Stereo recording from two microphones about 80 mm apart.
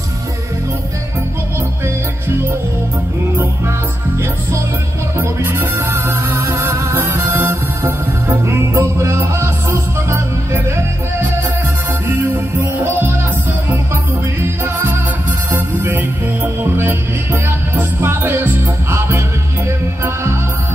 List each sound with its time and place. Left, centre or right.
5.4 s music: right
12.8 s music: right
14.6 s music: right